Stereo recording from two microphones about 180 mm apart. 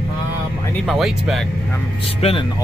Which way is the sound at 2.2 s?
35° left (ahead or behind).